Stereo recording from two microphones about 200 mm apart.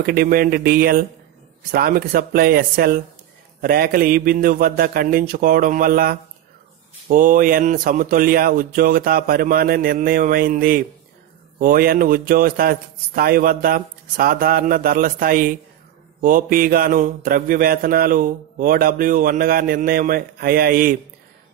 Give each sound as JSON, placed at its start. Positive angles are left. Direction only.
{"t": 0.0, "sound": "mantra", "side_deg": -50}